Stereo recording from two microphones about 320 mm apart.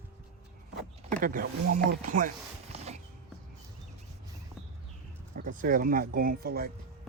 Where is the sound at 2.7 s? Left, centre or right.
Centre.